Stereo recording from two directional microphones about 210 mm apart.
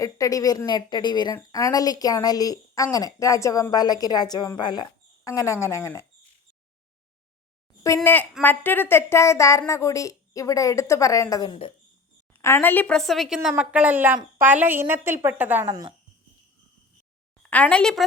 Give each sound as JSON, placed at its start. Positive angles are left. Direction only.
{"t": 0.0, "sound": "a woman's voice", "side_deg": 15}
{"t": 7.9, "sound": "a woman's voice", "side_deg": 10}
{"t": 12.4, "sound": "a woman's voice", "side_deg": 10}
{"t": 17.5, "sound": "a woman's voice", "side_deg": 5}